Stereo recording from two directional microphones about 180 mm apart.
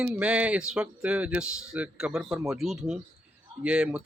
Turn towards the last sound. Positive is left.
turn(degrees=-5)  # may be behind; listen again after turning